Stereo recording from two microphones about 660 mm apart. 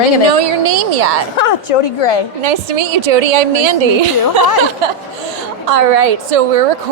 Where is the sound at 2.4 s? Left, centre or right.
Right.